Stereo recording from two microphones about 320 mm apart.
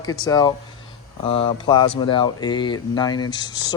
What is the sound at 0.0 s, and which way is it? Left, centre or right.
Speech, centre.